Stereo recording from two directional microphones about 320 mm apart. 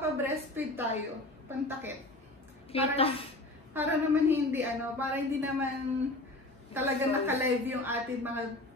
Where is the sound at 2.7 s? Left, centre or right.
Centre.